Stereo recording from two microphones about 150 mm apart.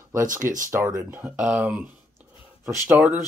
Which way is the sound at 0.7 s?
20° right (ahead or behind).